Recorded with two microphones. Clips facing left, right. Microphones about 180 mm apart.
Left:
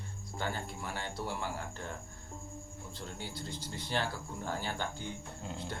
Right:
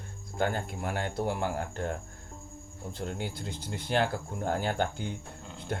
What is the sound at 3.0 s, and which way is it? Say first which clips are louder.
Speech: right 7 dB; 60° right (ahead or behind).